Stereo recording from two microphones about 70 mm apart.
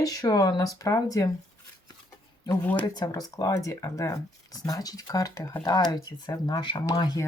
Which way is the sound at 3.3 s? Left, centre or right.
Left.